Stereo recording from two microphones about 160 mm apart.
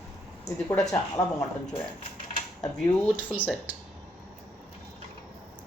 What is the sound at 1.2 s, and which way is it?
Speech, 20° left (ahead or behind).